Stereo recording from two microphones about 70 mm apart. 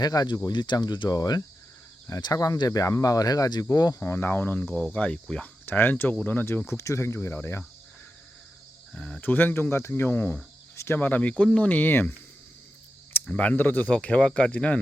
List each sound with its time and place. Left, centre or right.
0.0 s speech: left
0.4 s speech: left
4.0 s cricket: left; by 5.5 s centre
5.6 s cricket: left
6.2 s speech: left
6.7 s speech: left
8.9 s speech: centre
9.2 s speech: left
11.0 s cricket: left
13.2 s speech: centre